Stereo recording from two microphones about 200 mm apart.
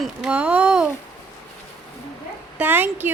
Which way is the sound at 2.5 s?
10° right (ahead or behind).